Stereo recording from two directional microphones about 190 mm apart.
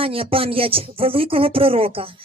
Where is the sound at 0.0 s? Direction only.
30° right (ahead or behind).